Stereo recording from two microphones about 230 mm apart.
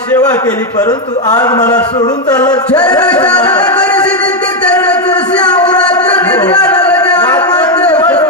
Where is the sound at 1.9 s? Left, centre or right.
Centre.